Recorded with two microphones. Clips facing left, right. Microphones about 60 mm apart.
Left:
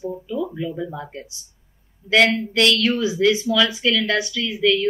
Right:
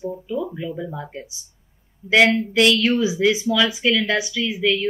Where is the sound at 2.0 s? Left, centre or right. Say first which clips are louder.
Right 1 dB; centre.